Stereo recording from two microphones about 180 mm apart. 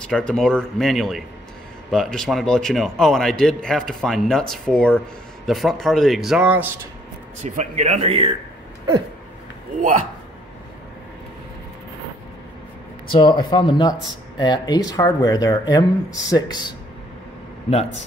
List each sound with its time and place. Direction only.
0.0 s a man's voice: 5° left (ahead or behind)
7.4 s speech: 40° right (ahead or behind)
13.1 s speech: 25° left (ahead or behind)